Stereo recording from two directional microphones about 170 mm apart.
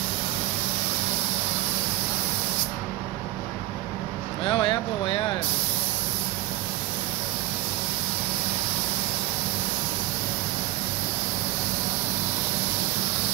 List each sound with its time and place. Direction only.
4.5 s speech: 30° left (ahead or behind)